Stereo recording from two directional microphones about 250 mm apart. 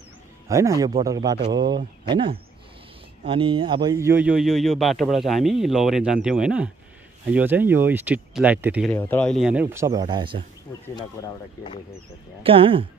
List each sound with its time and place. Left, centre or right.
0.5 s speech: centre
8.9 s speech: centre
12.4 s speech: right